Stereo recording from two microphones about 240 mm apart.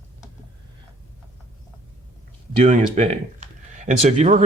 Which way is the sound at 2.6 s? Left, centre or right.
Right.